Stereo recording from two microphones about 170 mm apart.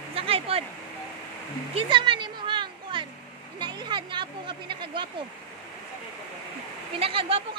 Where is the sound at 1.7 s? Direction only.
30° right (ahead or behind).